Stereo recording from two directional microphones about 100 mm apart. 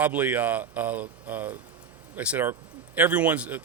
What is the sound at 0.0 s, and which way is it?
Speech, 20° right (ahead or behind).